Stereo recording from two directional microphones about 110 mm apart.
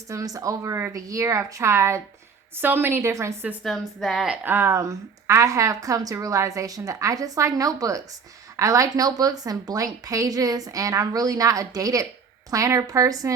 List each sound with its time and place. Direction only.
0.1 s speech: 30° right (ahead or behind)
3.6 s a woman's voice: centre (ahead or behind)
4.4 s speech: 25° right (ahead or behind)